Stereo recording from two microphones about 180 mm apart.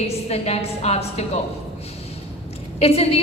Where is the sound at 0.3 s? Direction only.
35° left (ahead or behind).